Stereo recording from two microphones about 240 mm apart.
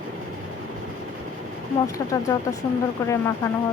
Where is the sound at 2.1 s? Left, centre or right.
Centre.